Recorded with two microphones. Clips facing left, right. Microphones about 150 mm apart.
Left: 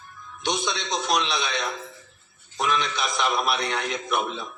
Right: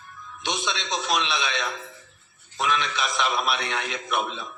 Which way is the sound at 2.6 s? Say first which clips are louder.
Left 1 dB; 40° left (ahead or behind).